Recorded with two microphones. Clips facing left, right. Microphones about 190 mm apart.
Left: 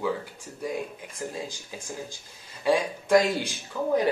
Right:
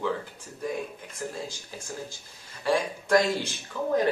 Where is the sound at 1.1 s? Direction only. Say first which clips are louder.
Left 1 dB; 15° left (ahead or behind).